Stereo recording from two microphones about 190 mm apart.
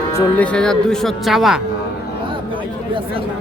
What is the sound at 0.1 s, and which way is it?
Speech, 10° left (ahead or behind).